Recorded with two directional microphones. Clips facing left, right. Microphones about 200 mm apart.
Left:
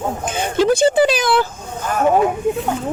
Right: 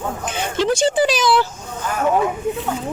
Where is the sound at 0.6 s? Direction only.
55° left (ahead or behind).